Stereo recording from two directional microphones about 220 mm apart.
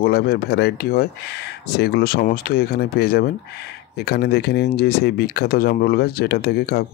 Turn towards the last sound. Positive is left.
turn(degrees=45)  # may be behind; listen again after turning